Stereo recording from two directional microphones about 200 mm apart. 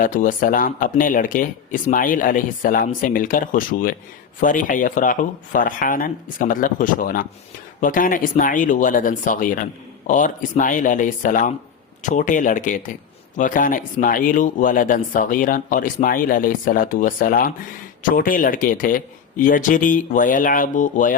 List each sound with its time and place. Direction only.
0.0 s speech: 40° left (ahead or behind)